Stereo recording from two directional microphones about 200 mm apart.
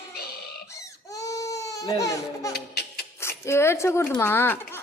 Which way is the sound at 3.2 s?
15° left (ahead or behind).